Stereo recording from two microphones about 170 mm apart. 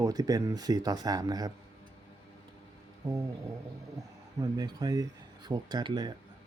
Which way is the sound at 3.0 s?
25° right (ahead or behind).